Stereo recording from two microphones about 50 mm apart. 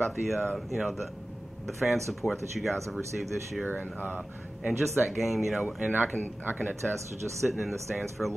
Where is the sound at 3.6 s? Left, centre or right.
Right.